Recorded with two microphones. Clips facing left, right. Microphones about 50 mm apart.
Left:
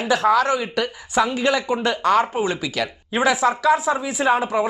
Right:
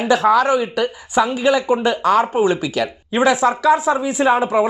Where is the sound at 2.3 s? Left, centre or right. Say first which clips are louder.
Right 6 dB; centre.